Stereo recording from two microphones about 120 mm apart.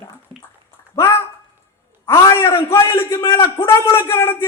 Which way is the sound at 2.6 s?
25° left (ahead or behind).